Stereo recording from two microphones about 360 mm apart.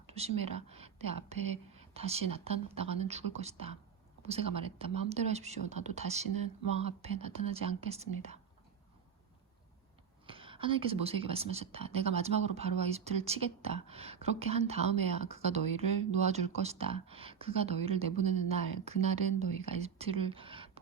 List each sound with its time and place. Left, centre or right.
0.1 s speech: centre
10.2 s speech: centre